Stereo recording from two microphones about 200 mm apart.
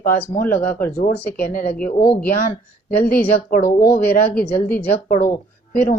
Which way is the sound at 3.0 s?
50° left (ahead or behind).